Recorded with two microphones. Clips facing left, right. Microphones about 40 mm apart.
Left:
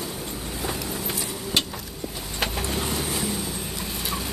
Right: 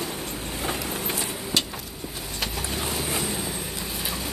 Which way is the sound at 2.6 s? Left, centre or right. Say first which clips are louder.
Left 2 dB; centre.